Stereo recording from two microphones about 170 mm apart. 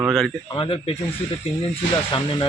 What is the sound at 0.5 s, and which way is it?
Speech, 35° left (ahead or behind).